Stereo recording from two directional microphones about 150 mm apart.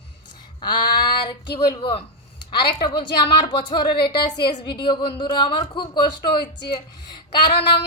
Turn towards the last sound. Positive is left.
turn(degrees=35)  # may be behind; listen again after turning